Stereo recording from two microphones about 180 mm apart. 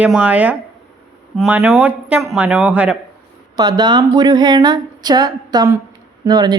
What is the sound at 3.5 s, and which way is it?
Speech, 20° right (ahead or behind).